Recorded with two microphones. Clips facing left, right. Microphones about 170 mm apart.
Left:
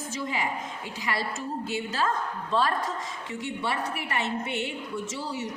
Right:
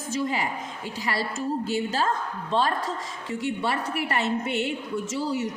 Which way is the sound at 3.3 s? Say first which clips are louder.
Right 5 dB; 40° right (ahead or behind).